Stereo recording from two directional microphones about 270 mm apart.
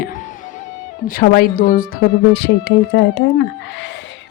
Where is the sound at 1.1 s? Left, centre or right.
Left.